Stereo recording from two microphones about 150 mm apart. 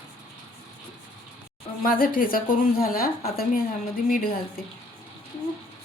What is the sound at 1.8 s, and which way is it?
A woman's voice, 70° left (ahead or behind).